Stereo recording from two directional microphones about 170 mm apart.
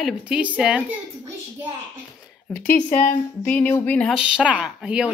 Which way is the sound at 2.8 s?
45° left (ahead or behind).